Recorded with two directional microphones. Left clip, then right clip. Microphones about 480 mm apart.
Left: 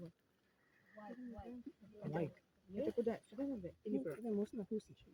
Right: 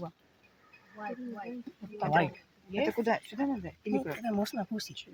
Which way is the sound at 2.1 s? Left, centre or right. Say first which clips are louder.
Right 16 dB; left.